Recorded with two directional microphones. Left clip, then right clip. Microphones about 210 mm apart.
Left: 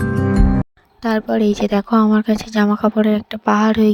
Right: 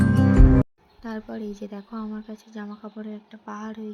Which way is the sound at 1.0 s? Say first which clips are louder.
Left 17 dB; 45° left (ahead or behind).